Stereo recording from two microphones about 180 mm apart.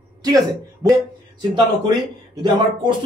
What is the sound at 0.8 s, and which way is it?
Speech, 20° right (ahead or behind).